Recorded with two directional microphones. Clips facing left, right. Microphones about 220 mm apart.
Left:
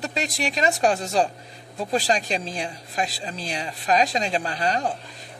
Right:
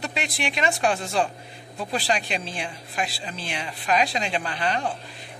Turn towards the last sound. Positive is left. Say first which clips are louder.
# left 2 dB
turn(degrees=40)  # may be behind; listen again after turning